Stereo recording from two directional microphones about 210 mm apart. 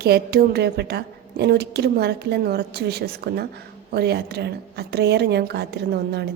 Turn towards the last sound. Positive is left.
turn(degrees=-50)  # may be behind; listen again after turning